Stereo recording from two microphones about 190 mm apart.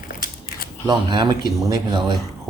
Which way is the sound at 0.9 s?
20° right (ahead or behind).